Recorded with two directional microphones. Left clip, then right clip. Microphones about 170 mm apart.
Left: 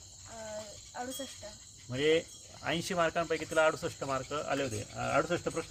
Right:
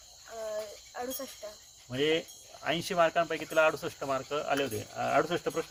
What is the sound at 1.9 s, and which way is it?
Speech, 20° left (ahead or behind).